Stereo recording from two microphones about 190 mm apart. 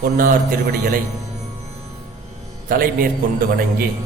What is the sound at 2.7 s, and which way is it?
Speech, 50° right (ahead or behind).